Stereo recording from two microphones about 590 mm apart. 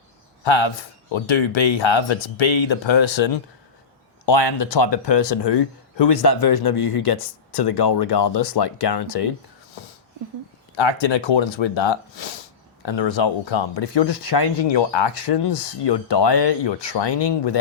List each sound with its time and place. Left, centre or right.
0.4 s speech: left
10.8 s speech: left